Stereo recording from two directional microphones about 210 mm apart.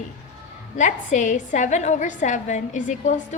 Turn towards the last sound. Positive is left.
turn(degrees=35)  # may be behind; listen again after turning